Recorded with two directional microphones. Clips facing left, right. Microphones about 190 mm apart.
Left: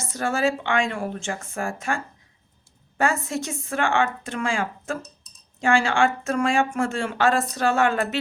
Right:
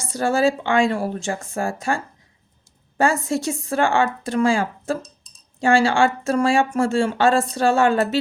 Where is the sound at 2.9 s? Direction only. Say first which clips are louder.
Right 4 dB; 30° right (ahead or behind).